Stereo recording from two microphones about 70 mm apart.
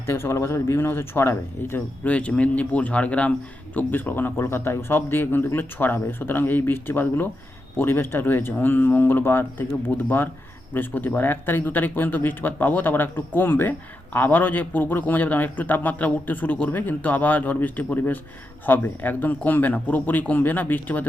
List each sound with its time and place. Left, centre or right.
0.0 s speech: left
2.0 s speech: centre